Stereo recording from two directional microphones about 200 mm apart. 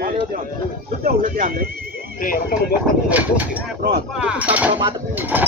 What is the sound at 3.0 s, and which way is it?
Speech, 5° right (ahead or behind).